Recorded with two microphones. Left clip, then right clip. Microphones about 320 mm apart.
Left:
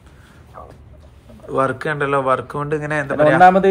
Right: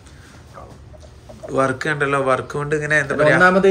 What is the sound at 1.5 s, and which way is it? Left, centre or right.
A man's voice, centre.